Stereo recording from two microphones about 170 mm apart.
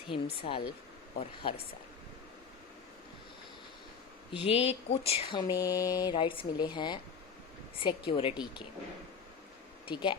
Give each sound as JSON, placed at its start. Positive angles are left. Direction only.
{"t": 0.1, "sound": "speech", "side_deg": 30}
{"t": 4.4, "sound": "a sound", "side_deg": 40}
{"t": 7.8, "sound": "speech", "side_deg": 30}
{"t": 9.8, "sound": "speech", "side_deg": 30}